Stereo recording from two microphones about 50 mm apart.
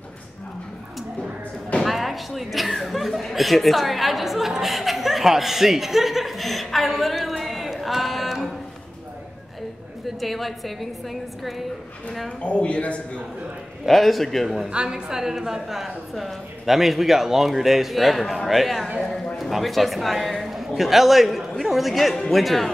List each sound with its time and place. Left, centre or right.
1.9 s speech: centre
10.0 s a woman's voice: centre
12.4 s speech: left
13.8 s speech: centre
14.7 s a man's voice: centre